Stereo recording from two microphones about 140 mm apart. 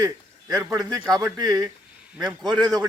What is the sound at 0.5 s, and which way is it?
A man's voice, 25° right (ahead or behind).